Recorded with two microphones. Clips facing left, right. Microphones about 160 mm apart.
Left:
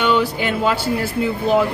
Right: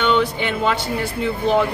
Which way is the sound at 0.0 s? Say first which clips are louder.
Left 1 dB; 5° left (ahead or behind).